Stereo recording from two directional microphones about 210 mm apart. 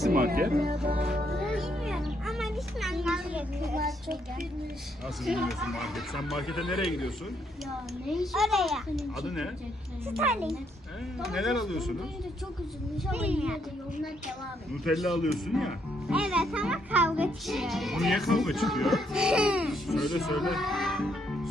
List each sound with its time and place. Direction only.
0.1 s speech: 45° right (ahead or behind)
1.4 s music: centre (ahead or behind)
5.2 s speech: centre (ahead or behind)
8.1 s speech: centre (ahead or behind)
11.3 s speech: centre (ahead or behind)
13.1 s speech: 10° right (ahead or behind)
14.8 s speech: centre (ahead or behind)